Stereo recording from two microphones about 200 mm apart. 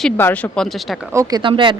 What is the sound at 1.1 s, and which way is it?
Speech, 15° right (ahead or behind).